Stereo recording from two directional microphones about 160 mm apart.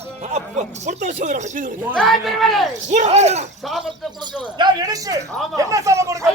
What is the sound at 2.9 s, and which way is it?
Speech, 45° right (ahead or behind).